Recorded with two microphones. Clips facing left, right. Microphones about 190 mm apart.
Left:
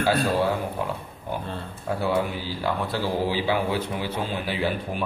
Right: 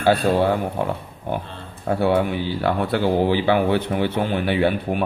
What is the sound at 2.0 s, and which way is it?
Speech, 65° right (ahead or behind).